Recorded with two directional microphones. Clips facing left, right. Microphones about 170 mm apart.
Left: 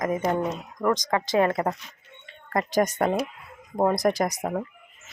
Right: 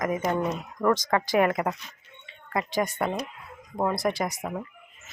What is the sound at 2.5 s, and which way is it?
Speech, 45° left (ahead or behind).